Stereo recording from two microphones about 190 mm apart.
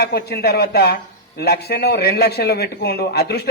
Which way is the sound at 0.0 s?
60° left (ahead or behind).